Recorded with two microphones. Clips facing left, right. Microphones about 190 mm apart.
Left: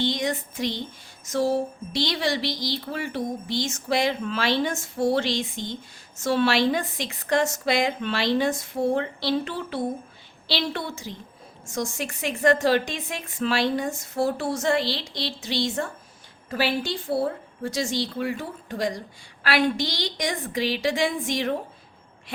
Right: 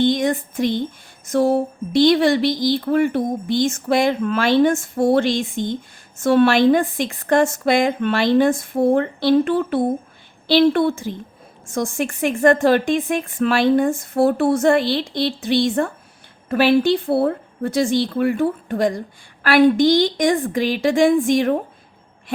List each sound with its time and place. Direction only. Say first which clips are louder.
0.0 s a woman's voice: right 8 dB; 50° right (ahead or behind)